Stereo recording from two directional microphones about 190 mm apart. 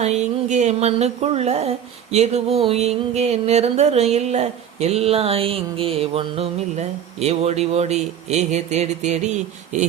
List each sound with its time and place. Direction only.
0.0 s music: 35° right (ahead or behind)